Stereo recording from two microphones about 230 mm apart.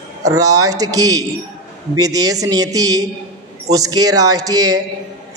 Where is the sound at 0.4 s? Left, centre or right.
Right.